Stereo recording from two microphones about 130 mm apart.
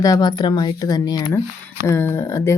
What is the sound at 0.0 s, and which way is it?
Speech, 30° left (ahead or behind).